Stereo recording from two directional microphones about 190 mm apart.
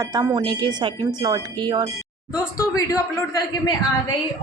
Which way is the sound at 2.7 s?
15° left (ahead or behind).